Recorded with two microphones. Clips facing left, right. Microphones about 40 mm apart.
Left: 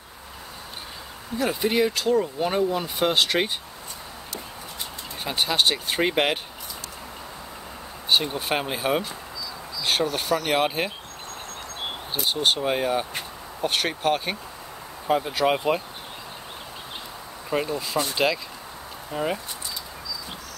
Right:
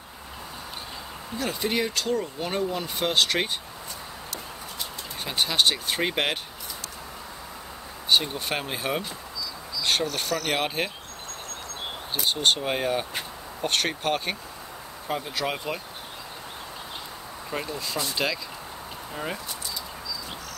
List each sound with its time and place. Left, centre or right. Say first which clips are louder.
1.4 s speech: left 5 dB; centre
5.2 s speech: left 1 dB; centre
8.1 s speech: left 1 dB; centre
9.8 s a sound: left 1 dB; centre
10.3 s speech: left 5 dB; centre
12.3 s speech: left 1 dB; centre
17.5 s speech: left 6 dB; centre